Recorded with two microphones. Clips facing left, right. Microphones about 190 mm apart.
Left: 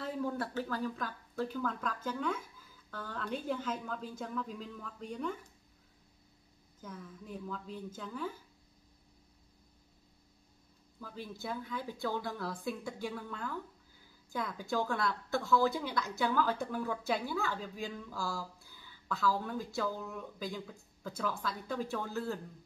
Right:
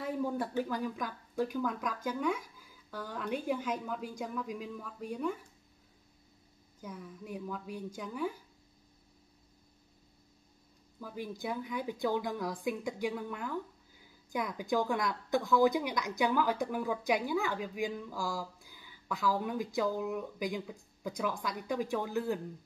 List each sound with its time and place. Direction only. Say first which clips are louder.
0.0 s a woman's voice: right 2 dB; 15° right (ahead or behind)
6.8 s a woman's voice: right 2 dB; 10° right (ahead or behind)
11.0 s a woman's voice: right 4 dB; 10° right (ahead or behind)